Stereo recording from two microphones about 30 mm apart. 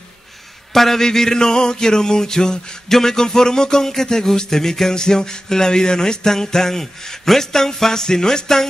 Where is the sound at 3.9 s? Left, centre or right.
Centre.